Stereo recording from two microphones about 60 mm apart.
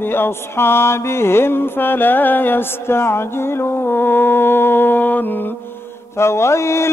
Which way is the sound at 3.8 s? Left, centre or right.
Left.